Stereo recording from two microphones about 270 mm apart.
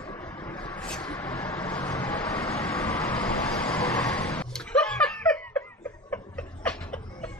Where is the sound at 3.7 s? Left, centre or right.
Centre.